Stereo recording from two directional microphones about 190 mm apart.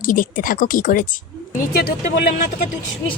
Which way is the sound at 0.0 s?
45° left (ahead or behind).